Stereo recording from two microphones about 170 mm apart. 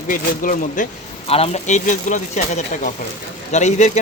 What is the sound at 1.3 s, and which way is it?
Speech, 40° left (ahead or behind).